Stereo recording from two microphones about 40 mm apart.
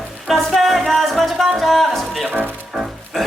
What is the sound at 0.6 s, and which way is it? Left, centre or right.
Music, centre.